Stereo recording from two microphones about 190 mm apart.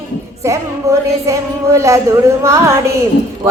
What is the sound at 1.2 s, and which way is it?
Music, 15° right (ahead or behind).